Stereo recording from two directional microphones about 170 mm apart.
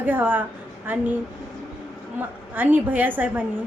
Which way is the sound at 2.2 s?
10° right (ahead or behind).